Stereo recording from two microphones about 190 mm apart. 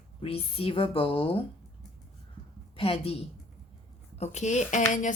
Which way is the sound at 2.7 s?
30° left (ahead or behind).